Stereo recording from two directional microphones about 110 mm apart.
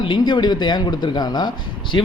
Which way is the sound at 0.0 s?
45° left (ahead or behind).